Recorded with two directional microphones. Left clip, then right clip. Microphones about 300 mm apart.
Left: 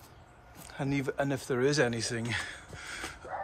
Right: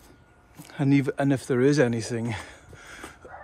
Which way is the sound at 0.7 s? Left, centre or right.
Right.